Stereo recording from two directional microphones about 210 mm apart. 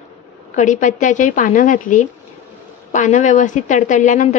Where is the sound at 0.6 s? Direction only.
35° left (ahead or behind).